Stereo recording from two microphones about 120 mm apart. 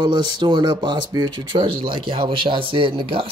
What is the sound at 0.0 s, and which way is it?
Speech, 40° right (ahead or behind).